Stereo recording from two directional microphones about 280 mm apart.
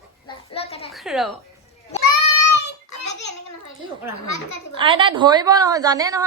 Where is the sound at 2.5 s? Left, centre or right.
Left.